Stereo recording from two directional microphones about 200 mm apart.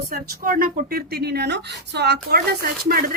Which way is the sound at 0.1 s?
45° right (ahead or behind).